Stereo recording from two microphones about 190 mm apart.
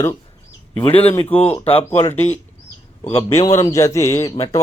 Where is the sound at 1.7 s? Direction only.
30° left (ahead or behind).